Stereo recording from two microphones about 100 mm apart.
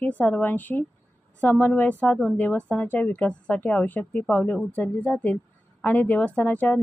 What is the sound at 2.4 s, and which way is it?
A woman's voice, 10° left (ahead or behind).